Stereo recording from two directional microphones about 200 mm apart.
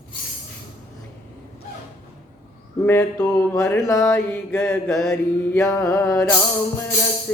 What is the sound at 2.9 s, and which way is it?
A man's voice, 10° left (ahead or behind).